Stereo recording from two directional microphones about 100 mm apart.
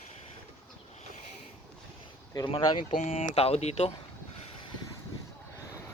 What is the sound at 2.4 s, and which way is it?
Speech, 55° left (ahead or behind).